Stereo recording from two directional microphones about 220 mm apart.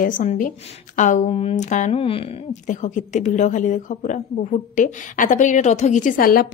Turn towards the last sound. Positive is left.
turn(degrees=40)  # may be behind; listen again after turning